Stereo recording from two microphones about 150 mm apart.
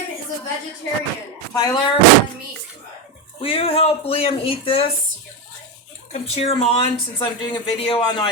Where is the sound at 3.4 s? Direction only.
40° left (ahead or behind).